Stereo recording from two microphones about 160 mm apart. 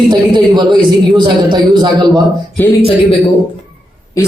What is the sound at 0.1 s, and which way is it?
A man's voice, 30° right (ahead or behind).